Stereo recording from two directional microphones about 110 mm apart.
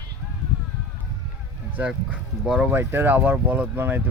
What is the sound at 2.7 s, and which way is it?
Speech, 20° right (ahead or behind).